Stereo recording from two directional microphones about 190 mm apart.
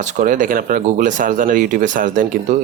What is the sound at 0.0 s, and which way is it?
Speech, 40° right (ahead or behind).